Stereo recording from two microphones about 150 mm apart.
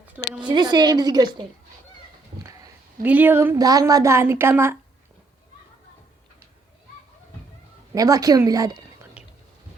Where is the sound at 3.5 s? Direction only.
25° right (ahead or behind).